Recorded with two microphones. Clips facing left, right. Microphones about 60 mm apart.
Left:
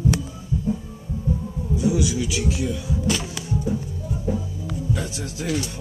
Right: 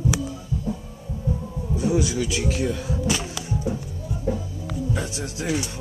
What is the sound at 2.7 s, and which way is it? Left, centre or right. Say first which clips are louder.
Speech: even; right.